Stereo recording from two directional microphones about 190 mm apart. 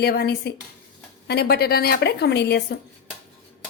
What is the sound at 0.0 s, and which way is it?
A woman's voice, 55° left (ahead or behind).